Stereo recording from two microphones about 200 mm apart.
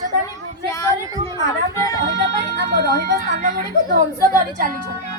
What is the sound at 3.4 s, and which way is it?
Speech, 40° right (ahead or behind).